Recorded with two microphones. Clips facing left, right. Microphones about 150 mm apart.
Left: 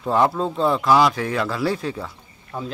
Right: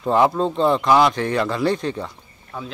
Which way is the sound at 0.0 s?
5° right (ahead or behind).